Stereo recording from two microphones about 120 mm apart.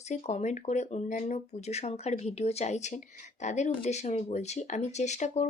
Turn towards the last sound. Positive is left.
turn(degrees=75)  # may be behind; listen again after turning